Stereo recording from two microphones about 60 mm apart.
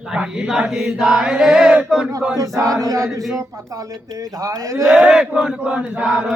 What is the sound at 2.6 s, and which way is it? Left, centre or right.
A man's voice, right.